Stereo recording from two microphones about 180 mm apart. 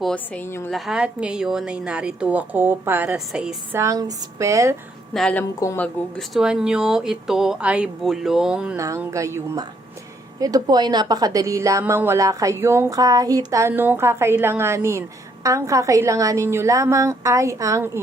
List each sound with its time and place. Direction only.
0.0 s a woman's voice: 5° left (ahead or behind)
0.7 s a woman's voice: 5° right (ahead or behind)
5.1 s speech: 5° left (ahead or behind)
8.8 s a woman's voice: 15° right (ahead or behind)